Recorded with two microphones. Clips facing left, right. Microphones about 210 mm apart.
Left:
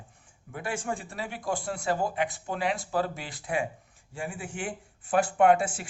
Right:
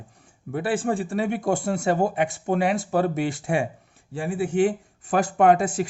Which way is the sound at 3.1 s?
70° right (ahead or behind).